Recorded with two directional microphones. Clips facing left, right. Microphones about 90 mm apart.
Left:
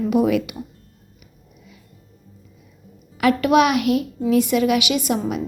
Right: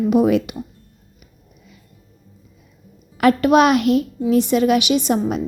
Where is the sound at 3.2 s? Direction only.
35° right (ahead or behind).